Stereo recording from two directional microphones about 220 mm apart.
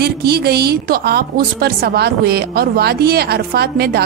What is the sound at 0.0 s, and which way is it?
A woman's voice, 45° right (ahead or behind).